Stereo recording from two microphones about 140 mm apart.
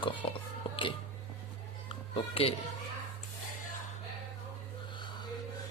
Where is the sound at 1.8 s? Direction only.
40° left (ahead or behind).